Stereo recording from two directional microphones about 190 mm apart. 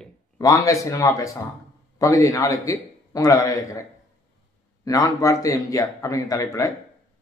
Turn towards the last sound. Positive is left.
turn(degrees=15)  # may be behind; listen again after turning